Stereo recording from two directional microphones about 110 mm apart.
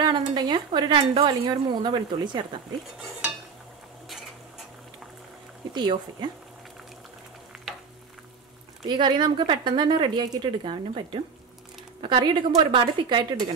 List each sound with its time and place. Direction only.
0.0 s speech: 40° right (ahead or behind)
5.7 s speech: 40° right (ahead or behind)
8.8 s speech: 45° right (ahead or behind)